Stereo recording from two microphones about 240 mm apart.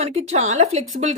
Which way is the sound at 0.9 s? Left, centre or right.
Right.